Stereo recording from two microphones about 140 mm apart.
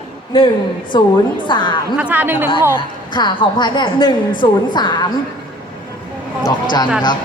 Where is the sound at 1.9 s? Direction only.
10° right (ahead or behind).